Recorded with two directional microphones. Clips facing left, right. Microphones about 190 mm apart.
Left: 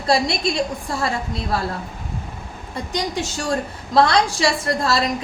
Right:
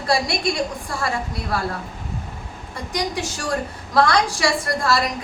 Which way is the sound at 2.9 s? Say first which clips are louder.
Left 1 dB; 25° left (ahead or behind).